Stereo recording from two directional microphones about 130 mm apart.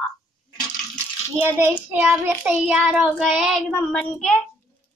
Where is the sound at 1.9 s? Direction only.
10° right (ahead or behind); by 4.4 s 5° left (ahead or behind).